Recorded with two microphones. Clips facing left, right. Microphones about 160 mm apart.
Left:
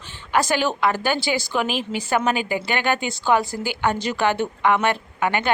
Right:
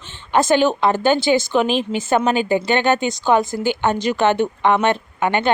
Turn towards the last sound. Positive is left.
turn(degrees=-25)  # may be behind; listen again after turning